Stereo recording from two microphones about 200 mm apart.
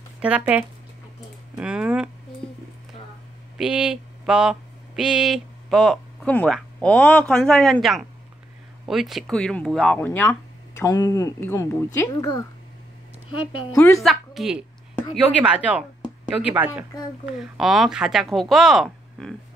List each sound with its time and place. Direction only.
0.2 s speech: 5° right (ahead or behind)
3.5 s a sound: 5° right (ahead or behind)
8.8 s a woman's voice: centre (ahead or behind); by 12.4 s 15° left (ahead or behind)
13.9 s speech: centre (ahead or behind)